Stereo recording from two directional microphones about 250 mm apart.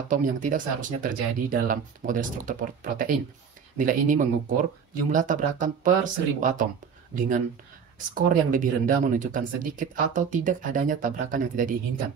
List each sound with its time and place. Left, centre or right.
0.1 s speech: right